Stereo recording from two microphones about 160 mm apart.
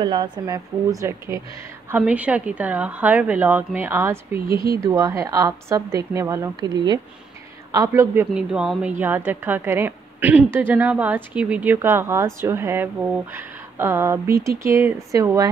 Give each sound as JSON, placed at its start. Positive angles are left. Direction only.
{"t": 0.0, "sound": "a woman's voice", "side_deg": -25}
{"t": 8.4, "sound": "a woman's voice", "side_deg": -5}